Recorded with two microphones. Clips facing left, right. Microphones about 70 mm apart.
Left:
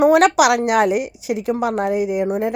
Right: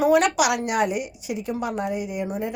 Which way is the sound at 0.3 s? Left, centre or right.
Left.